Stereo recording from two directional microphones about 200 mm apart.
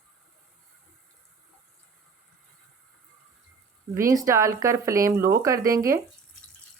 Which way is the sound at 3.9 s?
15° right (ahead or behind).